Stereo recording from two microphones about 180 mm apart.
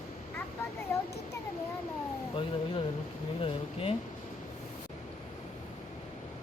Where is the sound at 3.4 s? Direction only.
30° left (ahead or behind).